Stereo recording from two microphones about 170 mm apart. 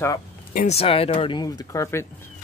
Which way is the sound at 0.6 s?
35° left (ahead or behind).